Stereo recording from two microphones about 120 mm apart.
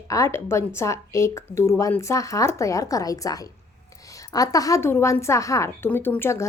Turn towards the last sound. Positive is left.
turn(degrees=20)  # may be behind; listen again after turning